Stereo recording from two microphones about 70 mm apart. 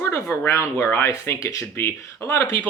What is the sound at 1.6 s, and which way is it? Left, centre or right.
Speech, left.